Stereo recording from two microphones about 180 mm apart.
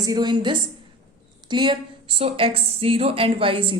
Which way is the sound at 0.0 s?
20° right (ahead or behind).